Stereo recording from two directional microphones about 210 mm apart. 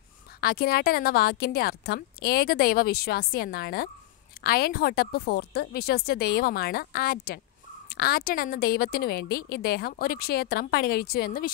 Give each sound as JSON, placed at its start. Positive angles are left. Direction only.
{"t": 0.4, "sound": "a woman's voice", "side_deg": 45}